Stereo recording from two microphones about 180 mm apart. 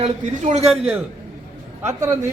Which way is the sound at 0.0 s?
35° right (ahead or behind).